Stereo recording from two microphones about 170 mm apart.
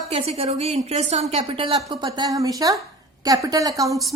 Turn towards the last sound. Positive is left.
turn(degrees=-20)  # may be behind; listen again after turning